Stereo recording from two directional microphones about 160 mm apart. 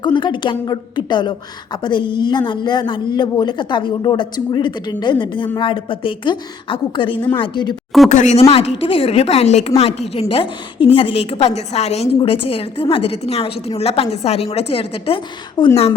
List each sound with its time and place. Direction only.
0.0 s speech: 30° left (ahead or behind)
8.1 s speech: 45° left (ahead or behind)